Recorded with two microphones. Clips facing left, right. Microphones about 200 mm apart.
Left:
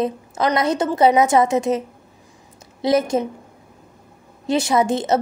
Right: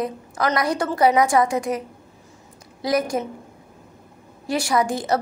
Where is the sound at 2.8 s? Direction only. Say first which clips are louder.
Left 4 dB; 25° left (ahead or behind).